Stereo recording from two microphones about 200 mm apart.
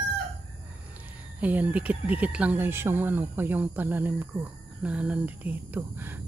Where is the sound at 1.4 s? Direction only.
10° right (ahead or behind).